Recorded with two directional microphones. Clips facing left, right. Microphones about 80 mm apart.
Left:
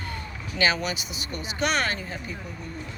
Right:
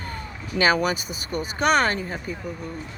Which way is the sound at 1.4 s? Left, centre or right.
Right.